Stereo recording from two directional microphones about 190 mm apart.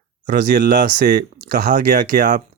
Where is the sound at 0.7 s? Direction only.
50° right (ahead or behind).